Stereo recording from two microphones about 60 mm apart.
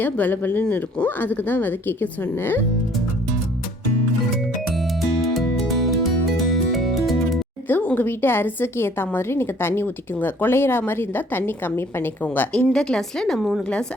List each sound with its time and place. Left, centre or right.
0.0 s a woman's voice: left
4.5 s music: centre
7.7 s a woman's voice: left
12.7 s a woman's voice: centre